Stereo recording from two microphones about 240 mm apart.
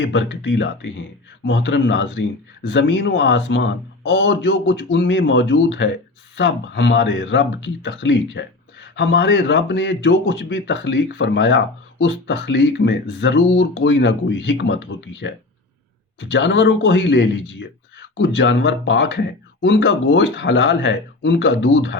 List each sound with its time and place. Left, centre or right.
0.0 s speech: left
16.3 s speech: left